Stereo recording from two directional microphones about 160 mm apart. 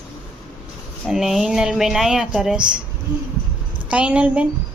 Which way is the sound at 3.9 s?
5° right (ahead or behind).